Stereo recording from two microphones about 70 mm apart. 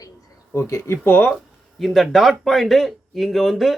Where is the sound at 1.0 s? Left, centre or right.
Left.